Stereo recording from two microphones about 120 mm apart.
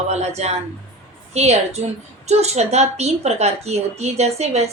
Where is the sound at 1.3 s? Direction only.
65° right (ahead or behind).